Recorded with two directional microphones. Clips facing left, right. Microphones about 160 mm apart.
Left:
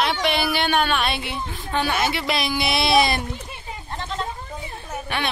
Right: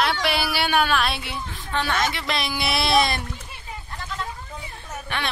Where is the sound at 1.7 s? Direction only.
10° left (ahead or behind).